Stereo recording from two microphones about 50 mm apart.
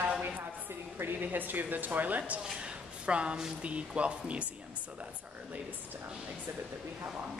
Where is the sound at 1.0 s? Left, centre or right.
Right.